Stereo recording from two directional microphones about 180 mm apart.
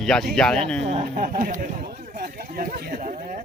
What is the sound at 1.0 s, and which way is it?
Speech, 50° right (ahead or behind).